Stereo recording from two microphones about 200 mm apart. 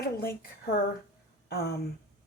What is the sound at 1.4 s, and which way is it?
Speech, 50° left (ahead or behind).